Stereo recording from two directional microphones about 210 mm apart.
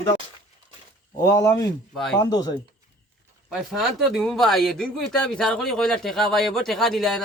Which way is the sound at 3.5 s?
Centre (ahead or behind).